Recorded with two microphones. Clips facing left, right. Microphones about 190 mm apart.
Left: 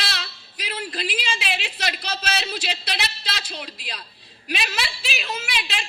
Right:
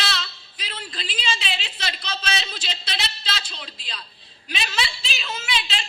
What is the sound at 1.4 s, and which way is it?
Speech, 60° left (ahead or behind).